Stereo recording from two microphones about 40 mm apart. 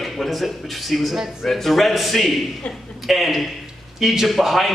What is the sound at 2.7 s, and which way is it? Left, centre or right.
Speech, left.